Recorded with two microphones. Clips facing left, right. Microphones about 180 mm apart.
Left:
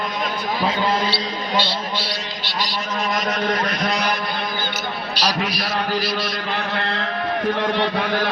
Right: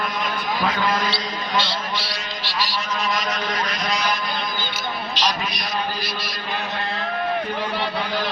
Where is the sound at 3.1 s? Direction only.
55° left (ahead or behind).